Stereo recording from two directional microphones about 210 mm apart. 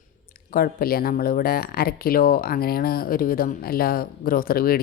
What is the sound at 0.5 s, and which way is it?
Speech, 45° left (ahead or behind).